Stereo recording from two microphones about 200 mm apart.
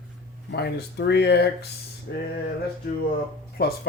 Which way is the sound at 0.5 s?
55° left (ahead or behind).